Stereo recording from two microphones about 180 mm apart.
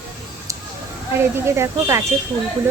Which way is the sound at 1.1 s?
15° right (ahead or behind).